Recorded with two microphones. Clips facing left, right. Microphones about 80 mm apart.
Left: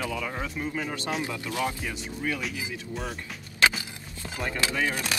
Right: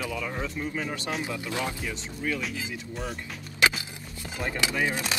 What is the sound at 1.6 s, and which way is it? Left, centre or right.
Speech, centre.